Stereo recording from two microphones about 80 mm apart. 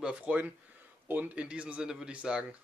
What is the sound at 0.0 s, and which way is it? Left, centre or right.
Speech, centre.